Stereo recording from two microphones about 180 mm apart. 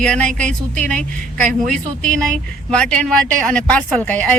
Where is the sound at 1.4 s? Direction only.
45° right (ahead or behind).